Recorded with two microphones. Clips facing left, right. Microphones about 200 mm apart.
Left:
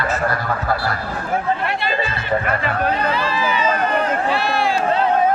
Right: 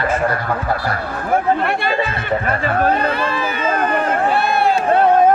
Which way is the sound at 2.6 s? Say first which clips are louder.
Right 3 dB; 45° right (ahead or behind).